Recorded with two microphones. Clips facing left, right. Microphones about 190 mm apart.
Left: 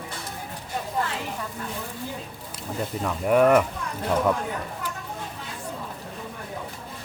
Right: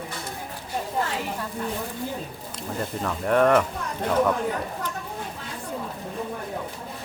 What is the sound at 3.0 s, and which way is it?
Speech, 5° left (ahead or behind).